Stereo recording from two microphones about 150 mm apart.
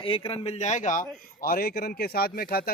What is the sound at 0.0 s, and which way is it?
A man's voice, 40° left (ahead or behind).